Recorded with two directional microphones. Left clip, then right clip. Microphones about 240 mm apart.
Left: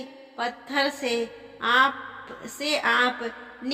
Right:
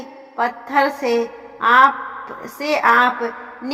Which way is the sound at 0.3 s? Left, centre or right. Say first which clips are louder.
Right 9 dB; right.